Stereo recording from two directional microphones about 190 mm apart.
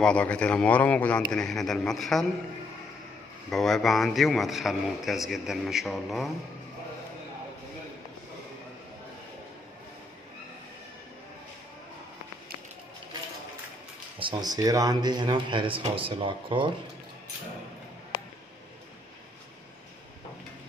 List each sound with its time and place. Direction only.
0.0 s a man's voice: 5° left (ahead or behind)
3.4 s a man's voice: centre (ahead or behind)
14.1 s speech: 25° right (ahead or behind)